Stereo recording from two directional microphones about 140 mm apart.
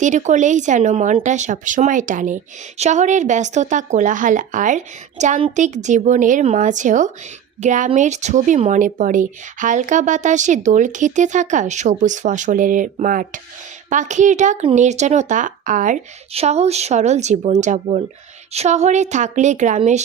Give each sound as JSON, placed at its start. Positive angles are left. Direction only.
{"t": 0.0, "sound": "speech", "side_deg": -60}
{"t": 16.3, "sound": "speech", "side_deg": -50}